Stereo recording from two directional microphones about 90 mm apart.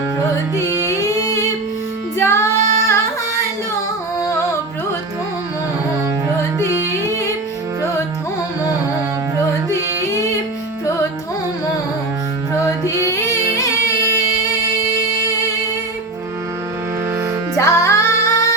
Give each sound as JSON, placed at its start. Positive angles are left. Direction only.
{"t": 0.9, "sound": "music", "side_deg": 35}
{"t": 2.1, "sound": "child singing", "side_deg": 30}
{"t": 13.2, "sound": "music", "side_deg": 40}
{"t": 17.6, "sound": "music", "side_deg": 35}